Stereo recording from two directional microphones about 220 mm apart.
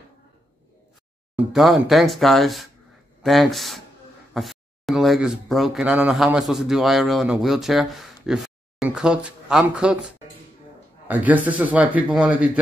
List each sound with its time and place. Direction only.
1.3 s speech: centre (ahead or behind)